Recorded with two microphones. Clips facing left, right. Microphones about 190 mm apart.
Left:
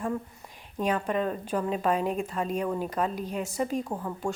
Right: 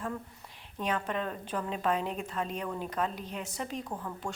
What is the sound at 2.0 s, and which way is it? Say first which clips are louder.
Speech: left 6 dB; 45° left (ahead or behind).